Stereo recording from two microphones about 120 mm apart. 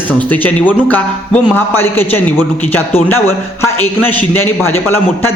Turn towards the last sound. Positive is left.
turn(degrees=20)  # may be behind; listen again after turning